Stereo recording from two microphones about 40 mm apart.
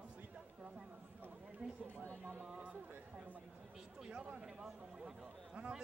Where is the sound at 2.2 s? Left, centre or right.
Right.